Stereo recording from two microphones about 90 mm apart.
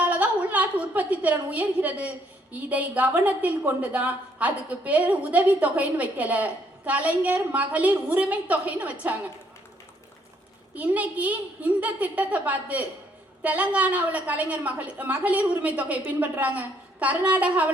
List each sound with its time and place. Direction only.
0.0 s a woman's voice: 15° right (ahead or behind)
10.8 s a woman's voice: 15° right (ahead or behind)